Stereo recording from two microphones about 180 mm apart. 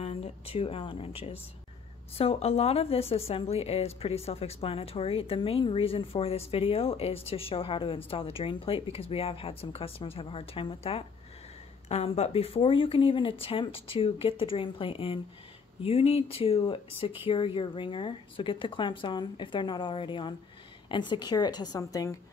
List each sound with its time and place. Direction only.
0.0 s speech: 35° left (ahead or behind); by 22.1 s 20° left (ahead or behind)